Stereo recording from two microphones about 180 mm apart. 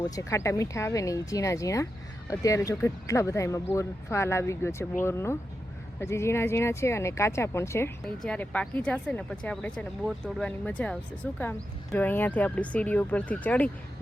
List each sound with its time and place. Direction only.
0.0 s speech: 15° left (ahead or behind)
8.0 s speech: 5° left (ahead or behind)
11.9 s speech: 10° left (ahead or behind)